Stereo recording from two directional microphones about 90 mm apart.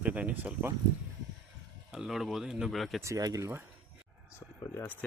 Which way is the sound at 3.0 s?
40° right (ahead or behind).